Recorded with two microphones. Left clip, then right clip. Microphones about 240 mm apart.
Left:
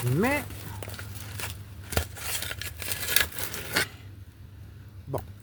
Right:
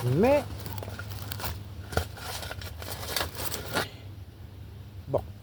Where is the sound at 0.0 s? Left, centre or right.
Left.